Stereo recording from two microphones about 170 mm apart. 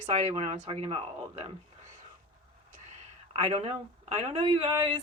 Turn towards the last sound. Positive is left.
turn(degrees=-30)  # may be behind; listen again after turning